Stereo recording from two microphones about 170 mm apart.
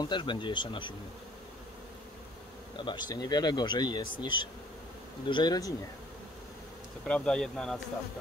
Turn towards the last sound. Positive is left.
turn(degrees=5)  # may be behind; listen again after turning